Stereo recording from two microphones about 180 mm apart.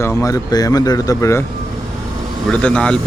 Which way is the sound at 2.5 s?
5° left (ahead or behind).